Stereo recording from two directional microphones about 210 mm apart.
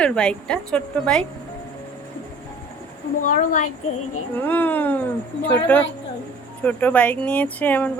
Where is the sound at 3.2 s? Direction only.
40° left (ahead or behind).